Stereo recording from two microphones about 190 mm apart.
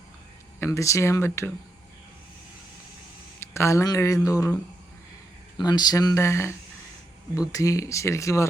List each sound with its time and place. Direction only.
0.6 s speech: 15° left (ahead or behind)
3.4 s speech: 15° left (ahead or behind)
5.5 s speech: 20° left (ahead or behind)